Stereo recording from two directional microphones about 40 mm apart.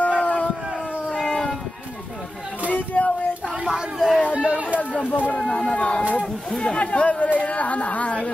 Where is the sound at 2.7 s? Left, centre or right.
Left.